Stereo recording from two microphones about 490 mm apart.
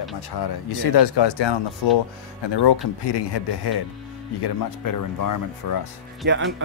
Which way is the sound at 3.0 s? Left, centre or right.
Left.